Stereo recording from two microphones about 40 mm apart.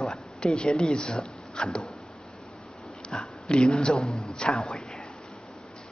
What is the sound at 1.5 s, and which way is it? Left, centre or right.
Dog, left.